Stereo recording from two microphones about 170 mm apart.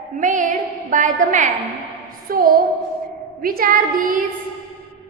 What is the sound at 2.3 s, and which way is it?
A woman's voice, 60° right (ahead or behind).